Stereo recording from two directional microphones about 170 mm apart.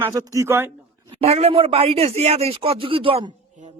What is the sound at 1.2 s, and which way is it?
Speech, 35° right (ahead or behind).